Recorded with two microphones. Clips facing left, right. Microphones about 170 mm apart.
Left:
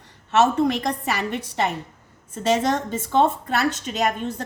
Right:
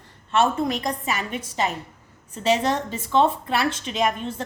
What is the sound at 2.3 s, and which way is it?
A woman's voice, 50° left (ahead or behind).